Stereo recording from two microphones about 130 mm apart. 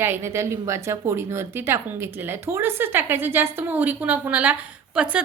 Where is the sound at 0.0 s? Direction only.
20° right (ahead or behind).